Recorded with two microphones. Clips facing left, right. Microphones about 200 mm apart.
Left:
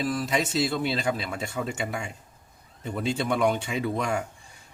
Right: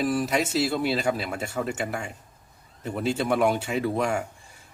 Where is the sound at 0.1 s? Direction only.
10° right (ahead or behind).